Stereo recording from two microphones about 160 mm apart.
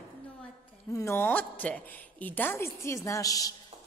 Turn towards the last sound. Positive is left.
turn(degrees=20)  # may be behind; listen again after turning